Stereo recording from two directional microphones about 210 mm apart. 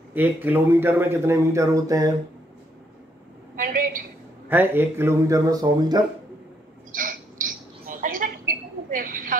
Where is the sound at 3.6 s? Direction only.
40° right (ahead or behind).